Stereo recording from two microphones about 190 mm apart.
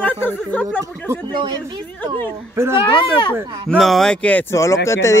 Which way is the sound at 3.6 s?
Centre (ahead or behind).